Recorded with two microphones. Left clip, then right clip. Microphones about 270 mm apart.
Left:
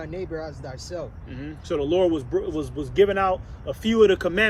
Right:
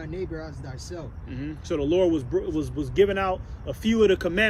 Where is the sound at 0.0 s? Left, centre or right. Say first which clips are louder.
Left 2 dB; centre.